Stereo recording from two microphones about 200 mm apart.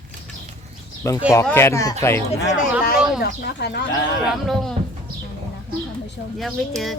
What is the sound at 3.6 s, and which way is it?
Speech, 55° left (ahead or behind).